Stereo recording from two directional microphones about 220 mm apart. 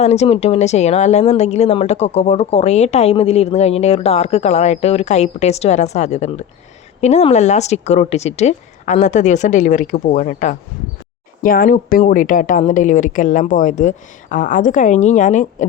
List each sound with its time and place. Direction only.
0.0 s a woman's voice: 30° left (ahead or behind)